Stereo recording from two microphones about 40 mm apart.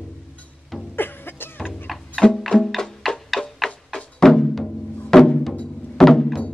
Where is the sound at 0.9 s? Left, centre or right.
Left.